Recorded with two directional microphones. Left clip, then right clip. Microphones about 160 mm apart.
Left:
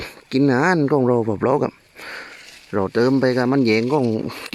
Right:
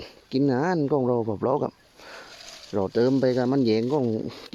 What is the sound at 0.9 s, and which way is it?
Speech, 35° left (ahead or behind).